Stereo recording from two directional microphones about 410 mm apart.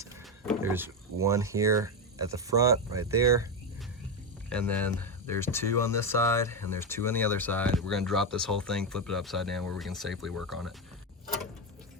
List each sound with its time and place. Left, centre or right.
0.0 s speech: centre
4.5 s speech: centre